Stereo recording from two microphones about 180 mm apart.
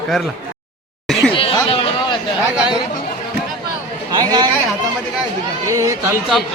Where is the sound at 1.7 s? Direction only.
30° left (ahead or behind).